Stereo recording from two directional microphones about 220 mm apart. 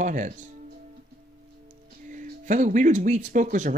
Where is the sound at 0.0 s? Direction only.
35° right (ahead or behind).